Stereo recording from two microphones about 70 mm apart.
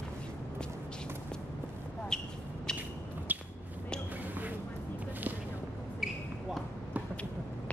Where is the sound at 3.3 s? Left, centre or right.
Right.